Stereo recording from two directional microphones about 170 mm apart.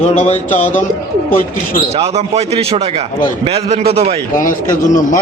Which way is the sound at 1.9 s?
35° right (ahead or behind).